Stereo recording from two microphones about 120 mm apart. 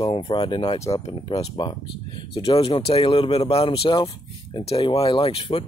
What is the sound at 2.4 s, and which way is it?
Speech, 55° left (ahead or behind).